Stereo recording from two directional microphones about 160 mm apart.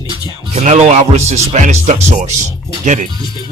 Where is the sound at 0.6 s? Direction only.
45° right (ahead or behind).